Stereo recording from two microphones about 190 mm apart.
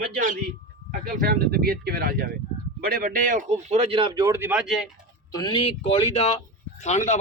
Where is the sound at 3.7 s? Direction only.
30° right (ahead or behind).